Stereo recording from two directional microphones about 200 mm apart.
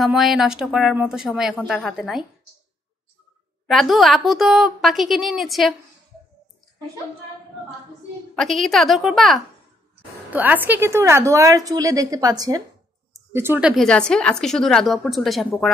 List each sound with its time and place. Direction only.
0.0 s a woman's voice: centre (ahead or behind)
3.6 s a woman's voice: centre (ahead or behind)
8.4 s a woman's voice: centre (ahead or behind)